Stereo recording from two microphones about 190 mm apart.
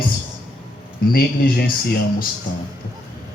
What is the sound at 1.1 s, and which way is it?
Speech, 55° left (ahead or behind).